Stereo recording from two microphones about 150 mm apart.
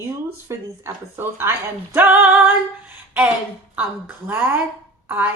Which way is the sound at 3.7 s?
10° right (ahead or behind).